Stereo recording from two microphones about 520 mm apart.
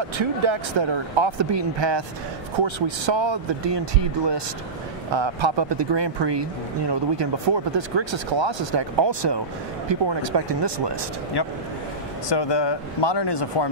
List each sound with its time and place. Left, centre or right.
0.2 s speech: right
11.4 s speech: left